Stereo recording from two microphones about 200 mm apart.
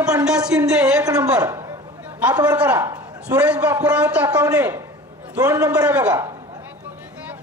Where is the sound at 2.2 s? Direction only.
5° right (ahead or behind).